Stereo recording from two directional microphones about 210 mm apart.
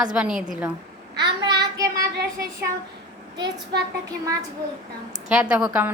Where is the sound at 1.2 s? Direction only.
20° right (ahead or behind).